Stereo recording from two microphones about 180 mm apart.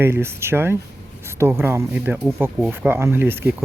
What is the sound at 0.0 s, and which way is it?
Speech, 15° right (ahead or behind).